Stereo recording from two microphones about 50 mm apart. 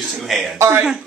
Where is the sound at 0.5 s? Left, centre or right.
Right.